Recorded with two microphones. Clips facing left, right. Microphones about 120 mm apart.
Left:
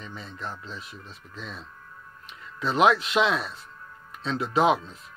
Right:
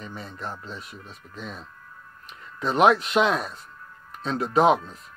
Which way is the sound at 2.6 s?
30° right (ahead or behind).